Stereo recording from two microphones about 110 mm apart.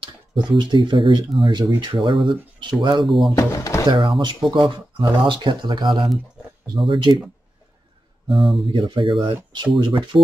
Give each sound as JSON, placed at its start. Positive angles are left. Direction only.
{"t": 0.0, "sound": "speech", "side_deg": -50}
{"t": 3.1, "sound": "speech", "side_deg": 0}
{"t": 3.3, "sound": "speech", "side_deg": 25}
{"t": 3.9, "sound": "speech", "side_deg": -50}
{"t": 8.7, "sound": "speech", "side_deg": -50}